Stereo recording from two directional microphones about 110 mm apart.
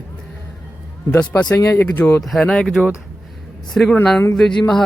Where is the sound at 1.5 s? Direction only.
25° left (ahead or behind).